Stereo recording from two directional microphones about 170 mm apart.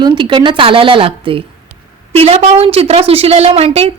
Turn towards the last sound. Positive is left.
turn(degrees=-35)  # may be behind; listen again after turning